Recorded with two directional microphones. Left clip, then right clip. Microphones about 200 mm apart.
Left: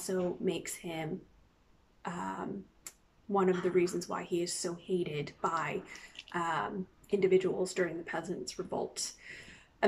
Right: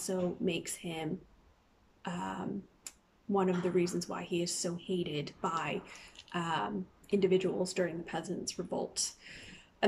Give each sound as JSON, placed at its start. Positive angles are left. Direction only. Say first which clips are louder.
{"t": 0.0, "sound": "speech", "louder": "left 1 dB", "side_deg": -10}
{"t": 2.0, "sound": "a sound", "louder": "left 1 dB", "side_deg": -10}
{"t": 3.3, "sound": "speech", "louder": "left 2 dB", "side_deg": -10}